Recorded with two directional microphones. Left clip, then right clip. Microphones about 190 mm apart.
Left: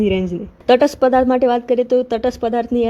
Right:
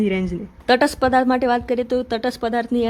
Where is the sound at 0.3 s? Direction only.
10° right (ahead or behind).